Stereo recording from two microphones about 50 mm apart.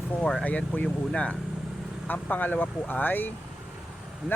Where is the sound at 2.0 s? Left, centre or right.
Left.